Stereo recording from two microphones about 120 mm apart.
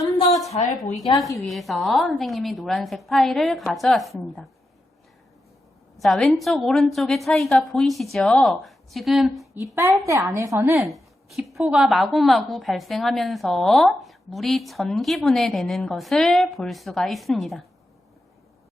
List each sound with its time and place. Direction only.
1.4 s a woman's voice: centre (ahead or behind)
6.0 s a woman's voice: centre (ahead or behind)
9.6 s a woman's voice: 25° right (ahead or behind)
10.8 s a woman's voice: centre (ahead or behind)